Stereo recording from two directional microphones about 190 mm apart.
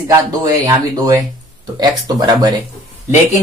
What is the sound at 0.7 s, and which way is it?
Speech, 20° right (ahead or behind).